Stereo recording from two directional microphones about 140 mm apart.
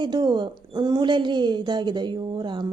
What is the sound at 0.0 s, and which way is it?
Speech, 30° right (ahead or behind).